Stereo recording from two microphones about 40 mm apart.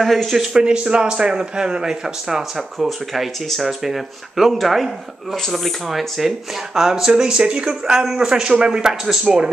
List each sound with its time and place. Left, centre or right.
0.0 s speech: centre
0.5 s speech: right
7.8 s speech: centre